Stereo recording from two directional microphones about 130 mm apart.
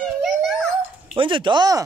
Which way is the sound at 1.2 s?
40° right (ahead or behind).